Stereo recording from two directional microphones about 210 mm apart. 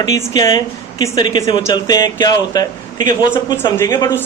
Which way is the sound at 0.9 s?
20° left (ahead or behind).